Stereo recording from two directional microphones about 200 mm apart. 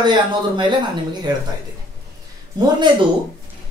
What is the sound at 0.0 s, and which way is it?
A woman's voice, 20° right (ahead or behind).